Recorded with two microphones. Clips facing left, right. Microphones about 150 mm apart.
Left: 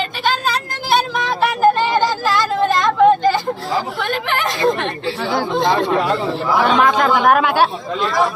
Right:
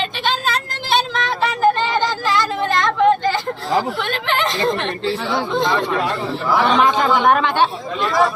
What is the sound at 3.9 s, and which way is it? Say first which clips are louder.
Speech: left 1 dB; 10° left (ahead or behind).